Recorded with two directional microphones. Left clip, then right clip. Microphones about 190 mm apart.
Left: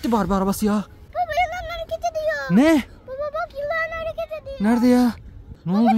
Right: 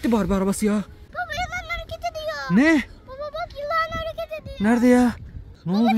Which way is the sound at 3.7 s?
20° right (ahead or behind).